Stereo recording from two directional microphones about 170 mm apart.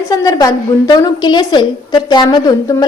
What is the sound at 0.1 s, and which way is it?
A woman's voice, 20° left (ahead or behind).